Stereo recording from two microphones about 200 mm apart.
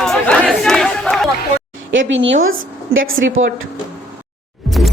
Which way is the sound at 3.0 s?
80° right.